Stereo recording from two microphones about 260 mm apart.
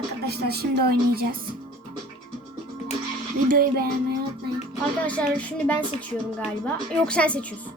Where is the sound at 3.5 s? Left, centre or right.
Right.